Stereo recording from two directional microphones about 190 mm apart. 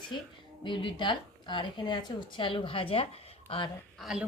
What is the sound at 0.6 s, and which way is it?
A woman's voice, 25° left (ahead or behind).